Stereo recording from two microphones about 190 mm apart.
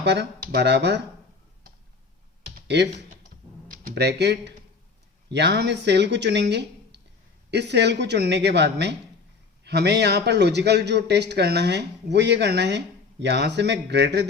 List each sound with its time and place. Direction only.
0.0 s a man's voice: 65° right (ahead or behind)
2.6 s speech: 65° right (ahead or behind)
3.7 s a man's voice: 55° right (ahead or behind)